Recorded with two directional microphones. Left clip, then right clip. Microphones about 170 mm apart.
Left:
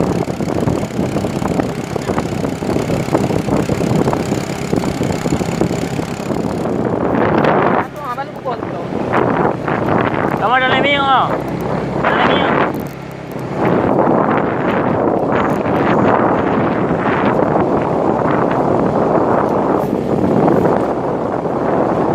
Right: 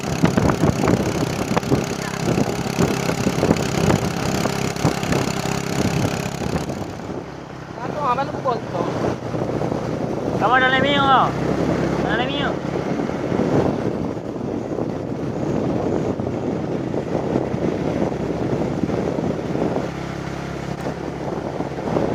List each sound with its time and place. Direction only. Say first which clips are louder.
10.5 s boat: left 3 dB; 20° left (ahead or behind)